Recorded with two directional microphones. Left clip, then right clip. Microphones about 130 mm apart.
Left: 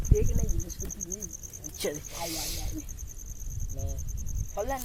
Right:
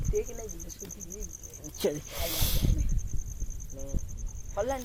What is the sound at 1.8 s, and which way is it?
Speech, 65° right (ahead or behind).